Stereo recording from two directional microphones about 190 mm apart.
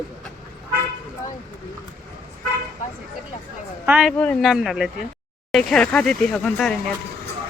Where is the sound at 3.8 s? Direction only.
5° right (ahead or behind).